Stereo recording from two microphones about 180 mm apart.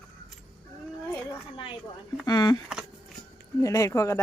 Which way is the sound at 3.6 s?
15° left (ahead or behind).